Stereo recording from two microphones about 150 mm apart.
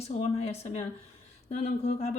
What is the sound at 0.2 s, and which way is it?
Speech, 45° left (ahead or behind).